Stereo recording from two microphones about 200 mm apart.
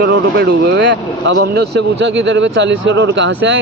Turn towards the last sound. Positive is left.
turn(degrees=-65)  # may be behind; listen again after turning